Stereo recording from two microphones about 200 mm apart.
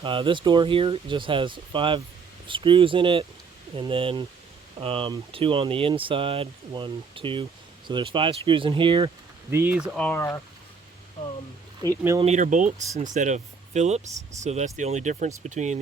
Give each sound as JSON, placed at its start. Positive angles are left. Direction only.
{"t": 0.0, "sound": "speech", "side_deg": -25}
{"t": 9.5, "sound": "speech", "side_deg": -10}
{"t": 12.2, "sound": "speech", "side_deg": -35}